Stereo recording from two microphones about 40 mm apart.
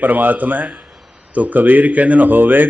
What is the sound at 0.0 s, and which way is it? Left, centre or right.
A man's voice, right.